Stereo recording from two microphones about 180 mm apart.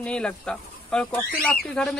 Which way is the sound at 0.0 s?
5° left (ahead or behind).